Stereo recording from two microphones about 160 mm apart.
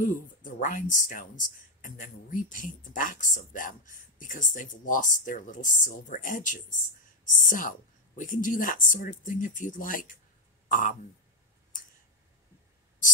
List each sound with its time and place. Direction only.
0.0 s speech: 55° left (ahead or behind)